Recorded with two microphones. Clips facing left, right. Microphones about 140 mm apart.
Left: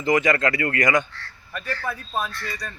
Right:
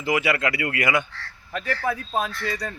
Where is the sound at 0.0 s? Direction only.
10° right (ahead or behind).